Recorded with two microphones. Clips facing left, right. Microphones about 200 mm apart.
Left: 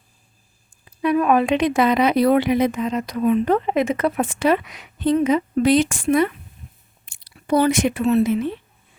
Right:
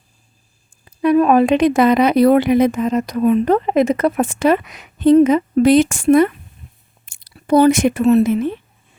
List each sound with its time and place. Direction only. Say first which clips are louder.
0.9 s speech: right 5 dB; 35° right (ahead or behind)